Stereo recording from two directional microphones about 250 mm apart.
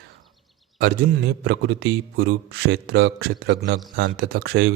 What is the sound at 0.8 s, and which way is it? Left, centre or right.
Speech, right.